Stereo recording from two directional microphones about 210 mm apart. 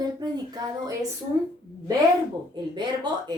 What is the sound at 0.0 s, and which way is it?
Speech, 20° right (ahead or behind).